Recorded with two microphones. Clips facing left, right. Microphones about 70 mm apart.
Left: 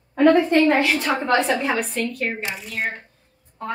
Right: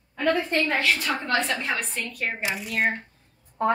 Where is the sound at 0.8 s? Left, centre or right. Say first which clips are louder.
Left 5 dB; left.